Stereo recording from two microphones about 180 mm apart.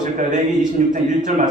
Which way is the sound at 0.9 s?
45° right (ahead or behind).